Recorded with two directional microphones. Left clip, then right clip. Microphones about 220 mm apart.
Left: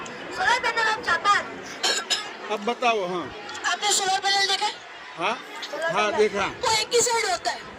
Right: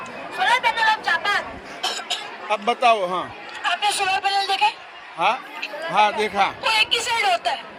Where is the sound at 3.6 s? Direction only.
25° right (ahead or behind).